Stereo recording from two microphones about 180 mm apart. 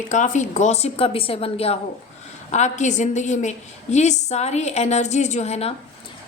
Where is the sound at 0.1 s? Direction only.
45° left (ahead or behind).